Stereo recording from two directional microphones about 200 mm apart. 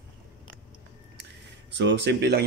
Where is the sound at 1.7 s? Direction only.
60° right (ahead or behind).